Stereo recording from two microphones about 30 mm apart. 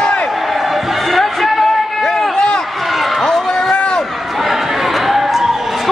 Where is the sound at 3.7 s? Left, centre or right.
Left.